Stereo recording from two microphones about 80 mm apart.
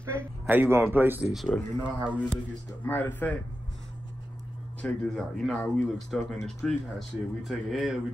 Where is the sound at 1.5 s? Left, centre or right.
Left.